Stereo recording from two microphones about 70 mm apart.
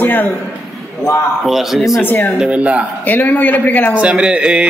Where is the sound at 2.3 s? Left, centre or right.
Centre.